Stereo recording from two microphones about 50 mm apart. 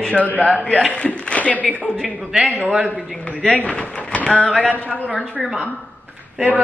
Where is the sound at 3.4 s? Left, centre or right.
Left.